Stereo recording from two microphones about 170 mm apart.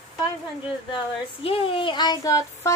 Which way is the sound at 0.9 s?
35° left (ahead or behind).